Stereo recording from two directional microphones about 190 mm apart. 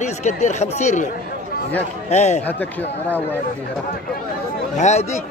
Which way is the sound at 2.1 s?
35° left (ahead or behind).